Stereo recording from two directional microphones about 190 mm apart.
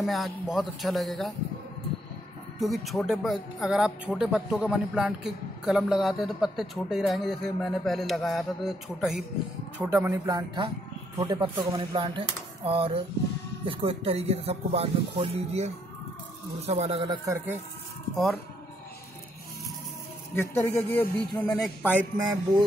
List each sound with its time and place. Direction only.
0.0 s speech: centre (ahead or behind)
2.6 s speech: centre (ahead or behind); by 17.4 s 25° right (ahead or behind)
18.1 s speech: centre (ahead or behind)
20.3 s speech: 10° left (ahead or behind)
22.2 s speech: 20° right (ahead or behind)